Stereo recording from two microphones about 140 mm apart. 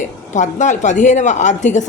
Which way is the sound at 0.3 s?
60° left (ahead or behind).